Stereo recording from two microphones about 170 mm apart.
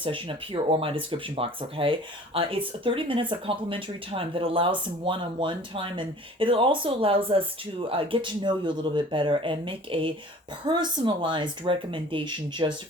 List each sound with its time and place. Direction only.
0.0 s speech: 30° right (ahead or behind)